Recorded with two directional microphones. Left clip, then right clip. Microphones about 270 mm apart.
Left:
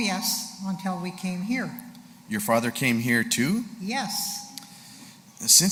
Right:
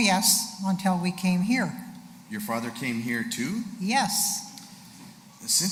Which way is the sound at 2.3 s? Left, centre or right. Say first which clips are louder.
Left 7 dB; left.